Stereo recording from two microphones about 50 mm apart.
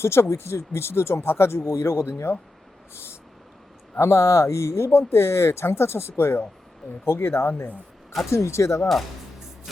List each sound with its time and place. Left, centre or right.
0.0 s speech: left
2.9 s vehicle: left
3.9 s speech: left
8.3 s speech: left